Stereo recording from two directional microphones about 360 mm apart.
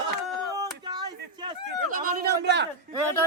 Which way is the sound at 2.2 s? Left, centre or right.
Right.